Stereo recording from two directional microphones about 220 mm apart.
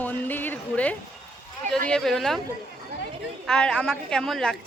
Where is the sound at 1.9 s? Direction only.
Centre (ahead or behind).